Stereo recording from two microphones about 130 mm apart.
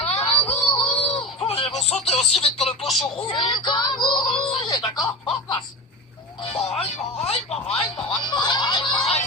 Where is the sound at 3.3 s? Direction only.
40° left (ahead or behind).